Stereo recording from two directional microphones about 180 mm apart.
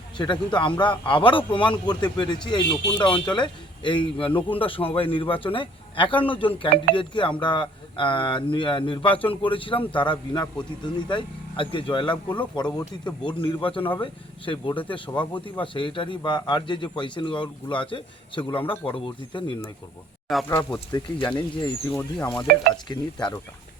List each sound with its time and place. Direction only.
0.2 s speech: 25° left (ahead or behind)
20.3 s speech: centre (ahead or behind)
20.9 s speech: 25° left (ahead or behind)
22.5 s stir: 55° right (ahead or behind)
22.9 s speech: 25° left (ahead or behind)